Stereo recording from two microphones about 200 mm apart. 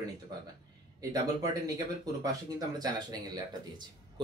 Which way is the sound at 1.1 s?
20° right (ahead or behind).